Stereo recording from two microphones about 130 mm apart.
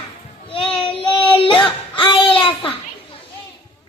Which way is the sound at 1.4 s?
40° left (ahead or behind).